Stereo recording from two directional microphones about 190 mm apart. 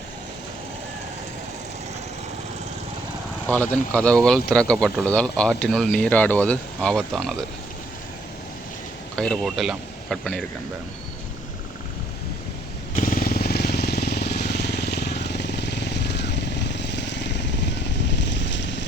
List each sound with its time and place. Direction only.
3.5 s speech: 5° left (ahead or behind)
9.1 s speech: 5° left (ahead or behind)
13.0 s vehicle: 45° left (ahead or behind); by 18.9 s 70° left (ahead or behind)